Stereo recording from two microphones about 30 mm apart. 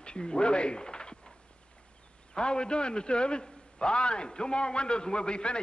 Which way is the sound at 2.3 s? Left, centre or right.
Left.